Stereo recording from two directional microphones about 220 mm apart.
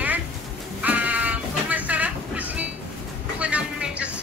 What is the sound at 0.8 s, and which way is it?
Sheep, 5° right (ahead or behind).